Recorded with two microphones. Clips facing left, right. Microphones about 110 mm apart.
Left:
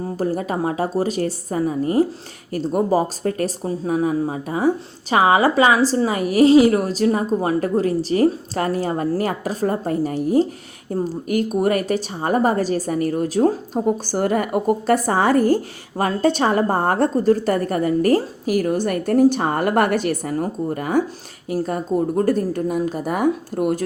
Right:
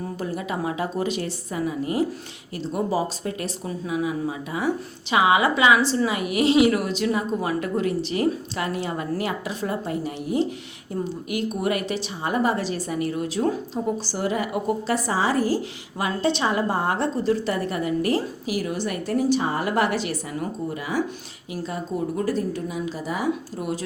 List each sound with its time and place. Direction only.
0.0 s a woman's voice: 40° left (ahead or behind)